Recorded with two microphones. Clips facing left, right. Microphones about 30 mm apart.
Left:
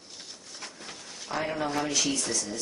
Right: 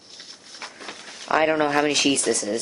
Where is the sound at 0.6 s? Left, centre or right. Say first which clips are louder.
Right 6 dB; right.